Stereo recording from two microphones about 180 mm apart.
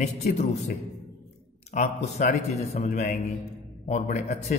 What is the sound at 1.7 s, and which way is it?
A man's voice, 40° left (ahead or behind).